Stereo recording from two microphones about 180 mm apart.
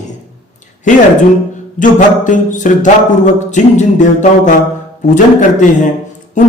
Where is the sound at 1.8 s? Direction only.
45° left (ahead or behind).